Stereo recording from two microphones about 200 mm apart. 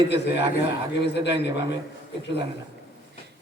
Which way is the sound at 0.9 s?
60° left (ahead or behind).